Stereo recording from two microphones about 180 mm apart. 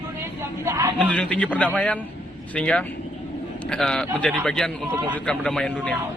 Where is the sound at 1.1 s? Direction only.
5° left (ahead or behind).